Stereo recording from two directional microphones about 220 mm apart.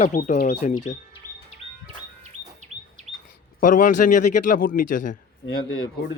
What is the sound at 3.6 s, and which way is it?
Speech, 35° left (ahead or behind).